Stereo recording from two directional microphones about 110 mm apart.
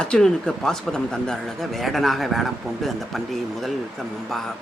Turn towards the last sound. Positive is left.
turn(degrees=5)  # may be behind; listen again after turning